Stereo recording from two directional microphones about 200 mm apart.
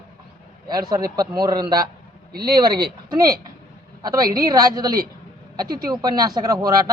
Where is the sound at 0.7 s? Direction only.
20° right (ahead or behind).